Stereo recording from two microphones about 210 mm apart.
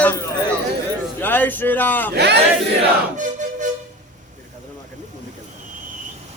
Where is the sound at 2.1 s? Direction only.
50° right (ahead or behind).